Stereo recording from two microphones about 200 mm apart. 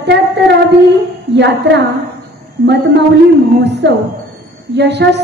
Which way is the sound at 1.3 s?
60° right (ahead or behind).